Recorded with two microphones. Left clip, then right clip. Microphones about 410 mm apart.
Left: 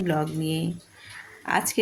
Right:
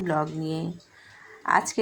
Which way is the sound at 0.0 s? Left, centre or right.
Left.